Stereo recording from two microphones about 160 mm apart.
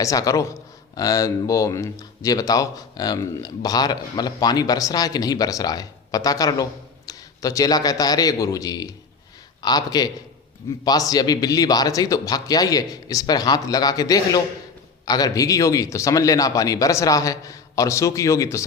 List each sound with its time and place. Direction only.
0.0 s a man's voice: 20° left (ahead or behind)